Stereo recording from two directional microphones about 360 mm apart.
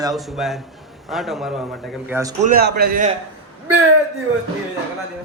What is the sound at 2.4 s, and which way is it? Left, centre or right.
Speech, right.